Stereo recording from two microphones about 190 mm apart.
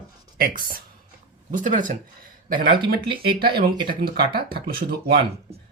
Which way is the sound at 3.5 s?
25° right (ahead or behind).